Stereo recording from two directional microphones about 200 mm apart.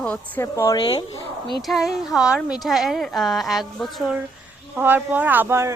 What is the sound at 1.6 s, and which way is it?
A woman's voice, centre (ahead or behind).